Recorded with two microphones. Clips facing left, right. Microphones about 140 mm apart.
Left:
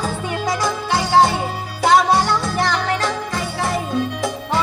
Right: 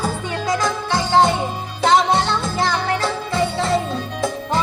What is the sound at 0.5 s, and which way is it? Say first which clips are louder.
Music: right 2 dB; 15° left (ahead or behind).